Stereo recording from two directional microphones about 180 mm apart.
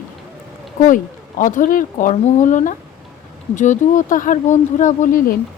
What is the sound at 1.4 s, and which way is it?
A man's voice, 45° left (ahead or behind).